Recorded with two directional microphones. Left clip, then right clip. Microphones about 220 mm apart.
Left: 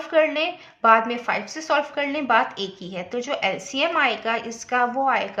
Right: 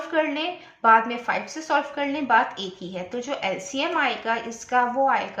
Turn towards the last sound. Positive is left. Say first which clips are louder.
# even
turn(degrees=35)  # may be behind; listen again after turning